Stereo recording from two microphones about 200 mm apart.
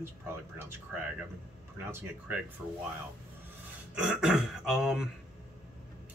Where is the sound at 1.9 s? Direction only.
10° right (ahead or behind).